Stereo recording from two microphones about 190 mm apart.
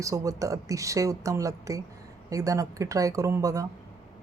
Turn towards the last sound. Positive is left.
turn(degrees=-15)  # may be behind; listen again after turning